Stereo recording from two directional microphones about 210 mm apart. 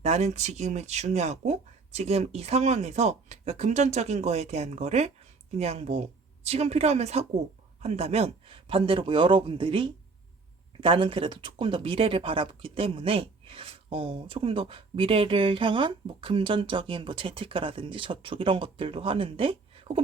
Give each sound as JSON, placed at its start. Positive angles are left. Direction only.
{"t": 0.0, "sound": "speech", "side_deg": -30}